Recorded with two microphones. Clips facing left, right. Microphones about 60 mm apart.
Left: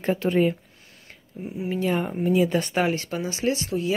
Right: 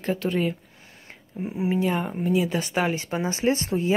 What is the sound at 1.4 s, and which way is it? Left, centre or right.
Speech, right.